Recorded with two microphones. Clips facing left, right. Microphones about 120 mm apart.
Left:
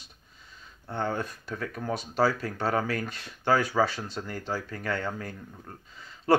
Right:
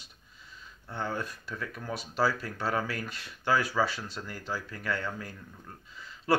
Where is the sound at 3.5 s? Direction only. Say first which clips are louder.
Left 3 dB; 50° left (ahead or behind).